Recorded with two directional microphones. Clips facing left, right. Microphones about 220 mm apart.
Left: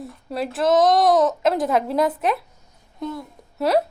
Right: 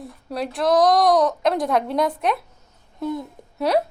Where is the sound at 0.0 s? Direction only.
Centre (ahead or behind).